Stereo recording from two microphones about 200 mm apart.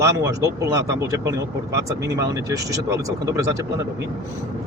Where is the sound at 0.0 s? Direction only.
15° right (ahead or behind).